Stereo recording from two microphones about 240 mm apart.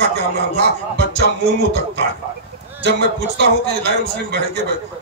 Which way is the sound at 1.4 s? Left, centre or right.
Right.